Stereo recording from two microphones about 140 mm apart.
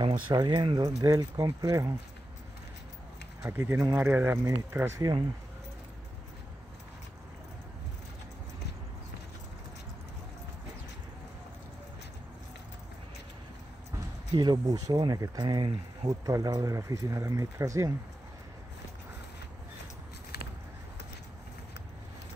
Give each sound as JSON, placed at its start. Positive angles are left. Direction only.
{"t": 0.3, "sound": "speech", "side_deg": -30}
{"t": 3.4, "sound": "speech", "side_deg": -15}
{"t": 13.9, "sound": "speech", "side_deg": -30}